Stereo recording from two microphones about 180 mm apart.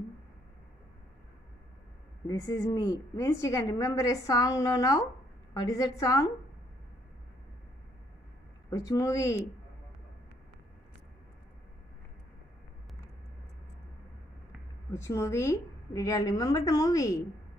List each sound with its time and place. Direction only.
2.2 s a woman's voice: 20° left (ahead or behind)
8.6 s speech: 20° left (ahead or behind)
14.9 s a woman's voice: 15° left (ahead or behind)